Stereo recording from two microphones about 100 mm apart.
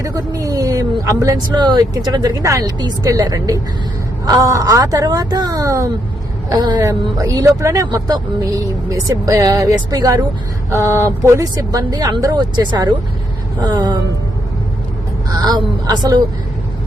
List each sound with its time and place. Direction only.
0.0 s speech: 35° right (ahead or behind)
1.5 s speech: 45° right (ahead or behind)
2.7 s speech: 45° right (ahead or behind)
3.1 s speech: 35° right (ahead or behind)
6.6 s speech: 45° right (ahead or behind)
10.7 s speech: 30° right (ahead or behind)
15.4 s speech: 45° right (ahead or behind)